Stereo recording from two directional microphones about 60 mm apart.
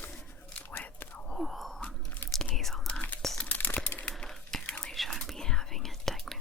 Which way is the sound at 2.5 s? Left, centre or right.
Centre.